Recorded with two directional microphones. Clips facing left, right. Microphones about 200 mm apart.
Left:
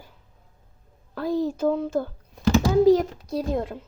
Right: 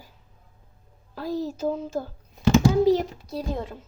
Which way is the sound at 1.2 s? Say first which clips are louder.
Left 4 dB; 55° left (ahead or behind).